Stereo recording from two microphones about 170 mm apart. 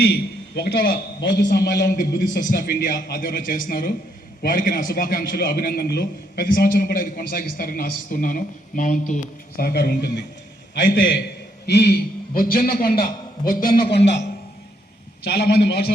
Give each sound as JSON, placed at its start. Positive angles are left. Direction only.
{"t": 0.0, "sound": "a man's voice", "side_deg": 70}
{"t": 2.0, "sound": "a man's voice", "side_deg": 50}
{"t": 10.8, "sound": "a man's voice", "side_deg": 90}
{"t": 13.8, "sound": "a man's voice", "side_deg": 90}
{"t": 15.2, "sound": "a man's voice", "side_deg": 75}